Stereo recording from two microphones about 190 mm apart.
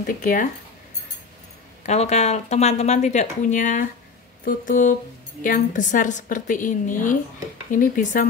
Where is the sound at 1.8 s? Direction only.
35° left (ahead or behind).